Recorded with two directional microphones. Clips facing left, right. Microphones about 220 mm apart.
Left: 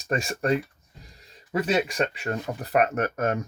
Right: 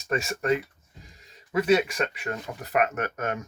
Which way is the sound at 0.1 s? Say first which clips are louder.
Left 1 dB; 35° left (ahead or behind).